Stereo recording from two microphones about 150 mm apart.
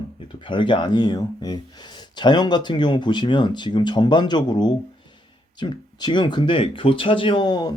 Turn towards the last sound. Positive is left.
turn(degrees=30)  # may be behind; listen again after turning